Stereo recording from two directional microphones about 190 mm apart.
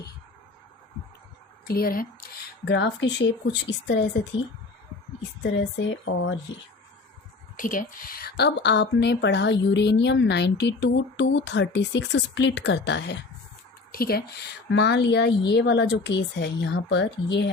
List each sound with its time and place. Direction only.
1.6 s speech: 50° left (ahead or behind)
2.6 s a woman's voice: 65° left (ahead or behind)
5.9 s speech: 85° left
7.5 s a woman's voice: 45° left (ahead or behind); by 13.1 s 65° left (ahead or behind)
13.9 s speech: 50° left (ahead or behind)
14.7 s a woman's voice: 70° left (ahead or behind)